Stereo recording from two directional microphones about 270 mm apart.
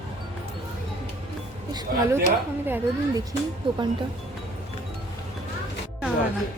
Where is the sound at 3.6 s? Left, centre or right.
Centre.